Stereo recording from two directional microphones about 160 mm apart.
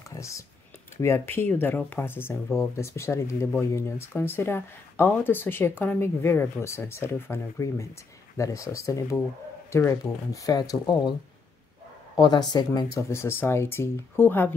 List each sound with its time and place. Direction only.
0.1 s speech: 20° left (ahead or behind)
12.2 s speech: 25° left (ahead or behind)